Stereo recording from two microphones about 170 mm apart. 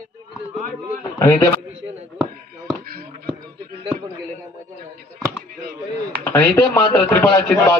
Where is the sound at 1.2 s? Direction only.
15° left (ahead or behind).